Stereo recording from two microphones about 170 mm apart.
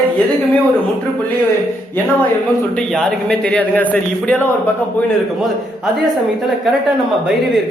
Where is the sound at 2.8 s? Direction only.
5° left (ahead or behind).